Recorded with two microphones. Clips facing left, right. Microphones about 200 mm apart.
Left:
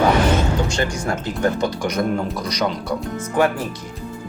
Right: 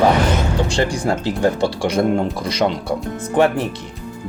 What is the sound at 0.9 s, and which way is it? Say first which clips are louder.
Speech: right 4 dB; 30° right (ahead or behind).